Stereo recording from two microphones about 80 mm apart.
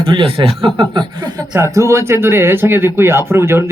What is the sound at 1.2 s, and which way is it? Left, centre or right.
Speech, right.